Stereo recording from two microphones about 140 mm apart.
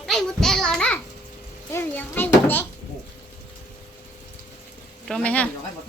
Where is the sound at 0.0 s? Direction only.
5° left (ahead or behind).